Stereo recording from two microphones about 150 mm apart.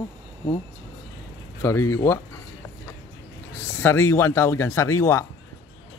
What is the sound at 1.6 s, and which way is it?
Speech, 15° left (ahead or behind).